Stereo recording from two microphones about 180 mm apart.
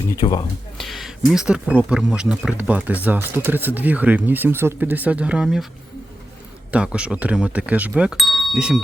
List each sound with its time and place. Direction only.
0.2 s speech: 25° left (ahead or behind)
0.8 s speech: centre (ahead or behind)
6.7 s speech: 5° right (ahead or behind)